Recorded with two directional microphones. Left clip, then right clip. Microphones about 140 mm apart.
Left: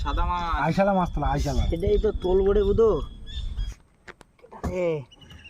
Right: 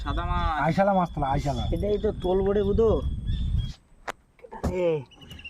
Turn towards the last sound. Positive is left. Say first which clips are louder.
# right 1 dB
turn(degrees=-15)  # may be behind; listen again after turning